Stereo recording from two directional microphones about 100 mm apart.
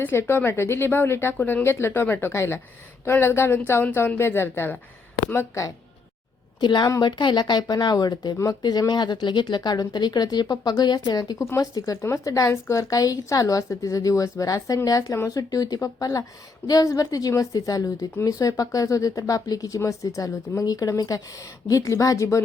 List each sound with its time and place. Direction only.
0.0 s speech: 25° left (ahead or behind)
6.6 s a woman's voice: 50° left (ahead or behind); by 22.4 s 30° left (ahead or behind)